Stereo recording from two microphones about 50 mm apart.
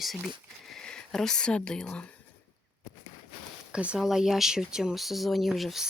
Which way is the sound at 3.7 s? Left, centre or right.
Right.